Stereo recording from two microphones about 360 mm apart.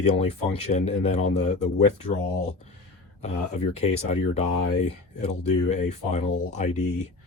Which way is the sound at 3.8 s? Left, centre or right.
Centre.